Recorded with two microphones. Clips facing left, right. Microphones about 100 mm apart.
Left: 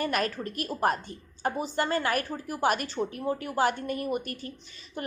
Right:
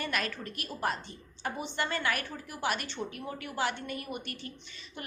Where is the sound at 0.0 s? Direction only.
40° left (ahead or behind).